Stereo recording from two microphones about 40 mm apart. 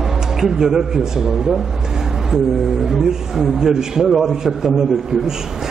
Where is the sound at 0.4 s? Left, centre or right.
Centre.